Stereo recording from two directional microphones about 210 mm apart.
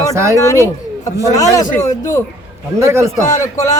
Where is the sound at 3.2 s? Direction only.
15° left (ahead or behind).